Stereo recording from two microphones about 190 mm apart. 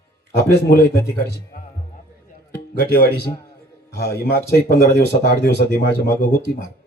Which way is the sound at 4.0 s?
55° left (ahead or behind).